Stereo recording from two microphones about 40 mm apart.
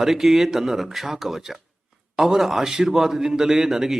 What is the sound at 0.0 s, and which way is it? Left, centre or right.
A man's voice, centre.